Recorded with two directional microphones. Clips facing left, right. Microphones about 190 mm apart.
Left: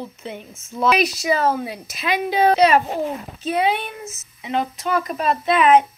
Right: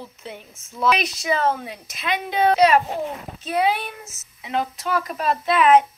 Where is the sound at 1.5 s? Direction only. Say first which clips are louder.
Left 6 dB; 5° left (ahead or behind).